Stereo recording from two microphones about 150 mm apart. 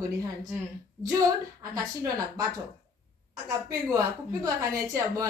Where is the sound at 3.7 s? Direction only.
25° right (ahead or behind).